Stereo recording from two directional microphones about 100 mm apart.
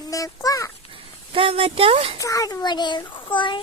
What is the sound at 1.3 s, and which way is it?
Speech, 70° right (ahead or behind).